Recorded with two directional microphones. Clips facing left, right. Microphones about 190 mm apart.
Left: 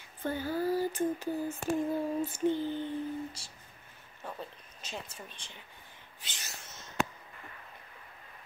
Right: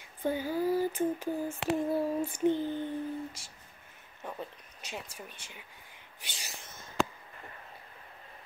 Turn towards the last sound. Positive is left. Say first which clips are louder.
# right 1 dB
turn(degrees=-55)  # may be behind; listen again after turning